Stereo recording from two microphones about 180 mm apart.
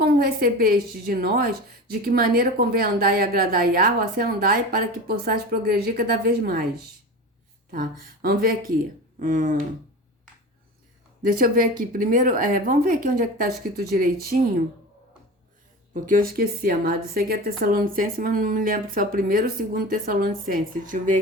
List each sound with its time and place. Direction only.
0.0 s speech: 60° right (ahead or behind)
7.7 s a woman's voice: 55° right (ahead or behind)
11.2 s a woman's voice: 50° right (ahead or behind)
16.0 s a woman's voice: 50° right (ahead or behind)